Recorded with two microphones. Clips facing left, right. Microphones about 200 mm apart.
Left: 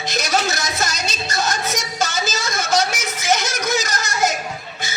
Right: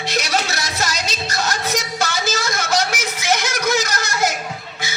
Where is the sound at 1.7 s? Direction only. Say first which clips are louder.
Right 1 dB; 60° right (ahead or behind).